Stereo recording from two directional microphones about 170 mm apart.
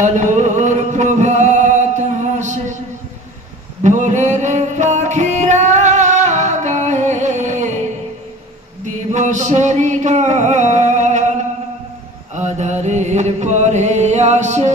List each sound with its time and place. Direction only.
0.0 s music: 45° right (ahead or behind)
3.8 s music: 45° right (ahead or behind)
8.8 s a sound: 45° right (ahead or behind)
12.4 s chant: 45° right (ahead or behind)